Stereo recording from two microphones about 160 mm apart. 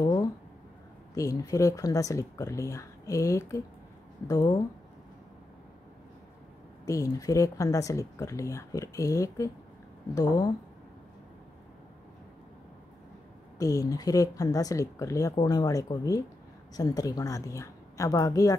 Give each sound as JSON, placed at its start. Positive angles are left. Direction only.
{"t": 0.0, "sound": "a sound", "side_deg": 25}
{"t": 1.1, "sound": "speech", "side_deg": 20}
{"t": 6.9, "sound": "speech", "side_deg": 20}
{"t": 13.6, "sound": "speech", "side_deg": 20}